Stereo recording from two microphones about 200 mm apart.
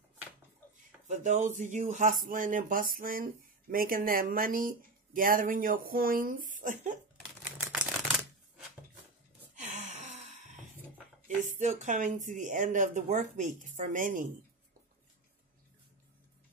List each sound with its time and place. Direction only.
1.0 s speech: 40° right (ahead or behind)
7.5 s typewriter: 5° right (ahead or behind)
9.6 s gasp: 35° right (ahead or behind)
11.2 s speech: 40° right (ahead or behind)